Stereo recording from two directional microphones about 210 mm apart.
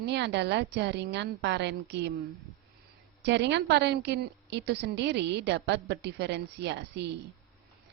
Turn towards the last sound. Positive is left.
turn(degrees=-55)  # may be behind; listen again after turning